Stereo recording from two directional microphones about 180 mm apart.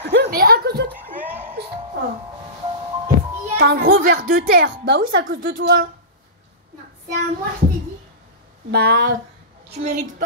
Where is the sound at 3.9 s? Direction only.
50° right (ahead or behind).